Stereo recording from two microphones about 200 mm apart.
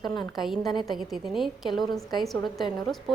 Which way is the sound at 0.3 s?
Centre (ahead or behind).